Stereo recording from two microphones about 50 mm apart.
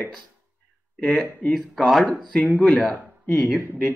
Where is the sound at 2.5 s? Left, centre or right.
Left.